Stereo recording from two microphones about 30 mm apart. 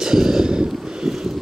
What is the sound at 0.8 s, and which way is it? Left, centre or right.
Wind noise, centre.